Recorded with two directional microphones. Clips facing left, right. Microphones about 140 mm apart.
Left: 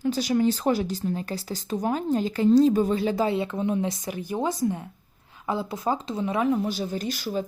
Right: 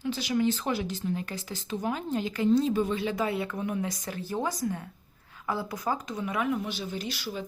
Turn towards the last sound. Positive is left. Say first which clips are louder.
# left 6 dB
turn(degrees=45)  # may be behind; listen again after turning